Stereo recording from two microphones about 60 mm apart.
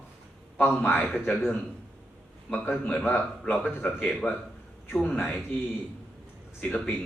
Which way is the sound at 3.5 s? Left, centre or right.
Left.